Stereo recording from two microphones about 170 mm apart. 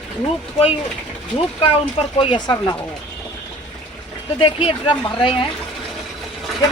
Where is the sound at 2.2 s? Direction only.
30° left (ahead or behind).